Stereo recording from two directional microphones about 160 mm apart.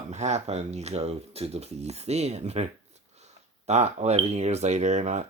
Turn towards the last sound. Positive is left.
turn(degrees=-45)  # may be behind; listen again after turning